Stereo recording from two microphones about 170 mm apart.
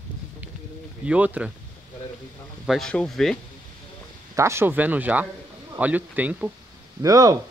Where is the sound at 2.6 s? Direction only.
Centre (ahead or behind).